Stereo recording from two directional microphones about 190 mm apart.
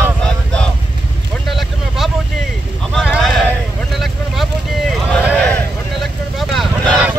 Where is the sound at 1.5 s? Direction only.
Centre (ahead or behind).